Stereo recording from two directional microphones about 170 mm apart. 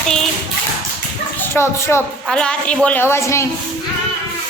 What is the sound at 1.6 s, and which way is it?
A woman's voice, 10° left (ahead or behind).